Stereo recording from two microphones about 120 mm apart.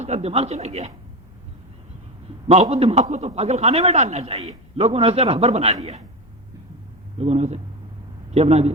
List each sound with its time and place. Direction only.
0.0 s a man's voice: 65° right (ahead or behind)
2.5 s a man's voice: 60° right (ahead or behind)
7.2 s a man's voice: 70° right (ahead or behind)